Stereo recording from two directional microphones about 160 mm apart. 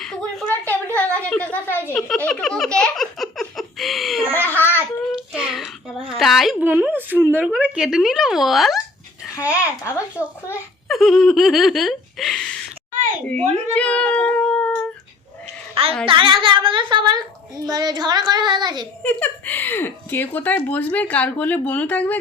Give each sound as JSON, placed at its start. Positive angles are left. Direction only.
{"t": 0.0, "sound": "a sound", "side_deg": 5}
{"t": 0.9, "sound": "speech", "side_deg": 10}
{"t": 2.0, "sound": "a sound", "side_deg": 5}
{"t": 4.4, "sound": "child singing", "side_deg": 15}
{"t": 5.3, "sound": "a sound", "side_deg": -5}
{"t": 6.7, "sound": "a woman's voice", "side_deg": -10}
{"t": 9.5, "sound": "a child's voice", "side_deg": 20}
{"t": 10.8, "sound": "speech", "side_deg": 0}
{"t": 13.7, "sound": "a woman's voice", "side_deg": 5}
{"t": 15.7, "sound": "a child's voice", "side_deg": -35}
{"t": 17.7, "sound": "child singing", "side_deg": -25}
{"t": 19.0, "sound": "a woman's voice", "side_deg": 10}